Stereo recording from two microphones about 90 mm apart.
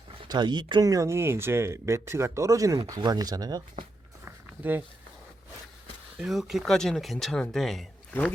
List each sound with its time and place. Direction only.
0.3 s speech: 55° right (ahead or behind)
0.9 s speech: 35° right (ahead or behind)
3.0 s speech: 50° right (ahead or behind)
4.3 s a sound: 20° right (ahead or behind)
6.1 s speech: 5° right (ahead or behind)